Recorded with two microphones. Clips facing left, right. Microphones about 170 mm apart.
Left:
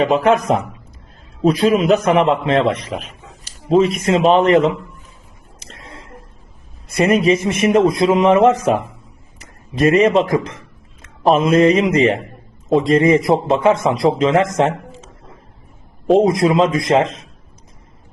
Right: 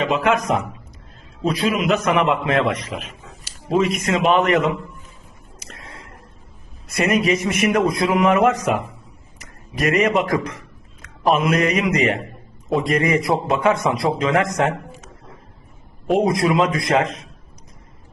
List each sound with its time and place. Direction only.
0.0 s a man's voice: 35° left (ahead or behind)
5.5 s a sound: 25° left (ahead or behind)
6.8 s a man's voice: 30° left (ahead or behind)